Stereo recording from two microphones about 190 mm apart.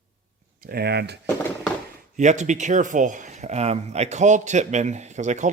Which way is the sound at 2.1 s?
40° right (ahead or behind).